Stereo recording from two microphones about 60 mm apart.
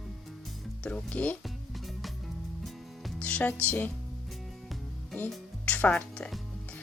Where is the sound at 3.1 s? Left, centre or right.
Left.